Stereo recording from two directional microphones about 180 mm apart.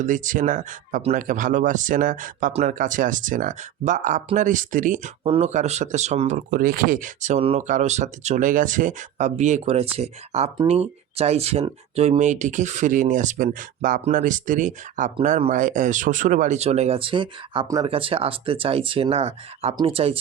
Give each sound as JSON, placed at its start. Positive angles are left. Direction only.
{"t": 0.0, "sound": "speech", "side_deg": -45}
{"t": 5.2, "sound": "speech", "side_deg": -35}